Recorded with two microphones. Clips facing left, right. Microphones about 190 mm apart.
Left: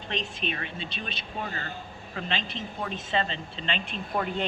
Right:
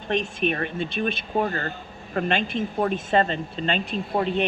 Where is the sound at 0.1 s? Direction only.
50° right (ahead or behind).